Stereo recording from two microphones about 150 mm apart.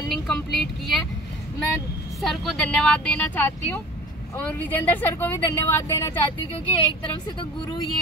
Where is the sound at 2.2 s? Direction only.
Centre (ahead or behind).